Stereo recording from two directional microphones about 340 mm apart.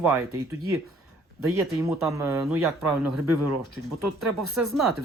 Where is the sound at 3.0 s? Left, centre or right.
Right.